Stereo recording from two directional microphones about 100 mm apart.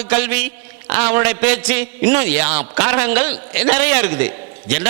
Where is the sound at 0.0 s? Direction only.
20° right (ahead or behind).